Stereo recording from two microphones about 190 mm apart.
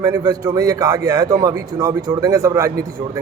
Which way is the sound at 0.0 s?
15° right (ahead or behind).